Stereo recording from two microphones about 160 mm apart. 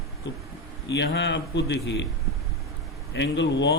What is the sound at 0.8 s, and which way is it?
A man's voice, 90° left.